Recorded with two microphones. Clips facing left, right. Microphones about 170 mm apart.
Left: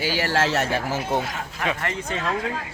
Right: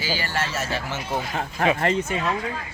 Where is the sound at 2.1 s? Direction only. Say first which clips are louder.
Right 1 dB; 5° right (ahead or behind).